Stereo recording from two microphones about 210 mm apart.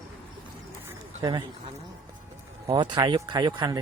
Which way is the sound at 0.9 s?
20° right (ahead or behind).